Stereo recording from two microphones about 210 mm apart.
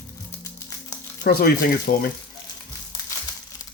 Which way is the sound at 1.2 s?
45° left (ahead or behind).